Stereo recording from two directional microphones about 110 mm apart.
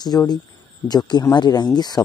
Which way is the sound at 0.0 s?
40° left (ahead or behind).